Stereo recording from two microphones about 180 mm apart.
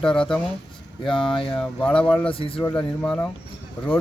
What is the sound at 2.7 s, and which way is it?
Speech, 5° left (ahead or behind).